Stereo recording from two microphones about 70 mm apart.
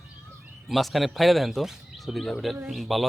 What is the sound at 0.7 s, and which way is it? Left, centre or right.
A man's voice, centre.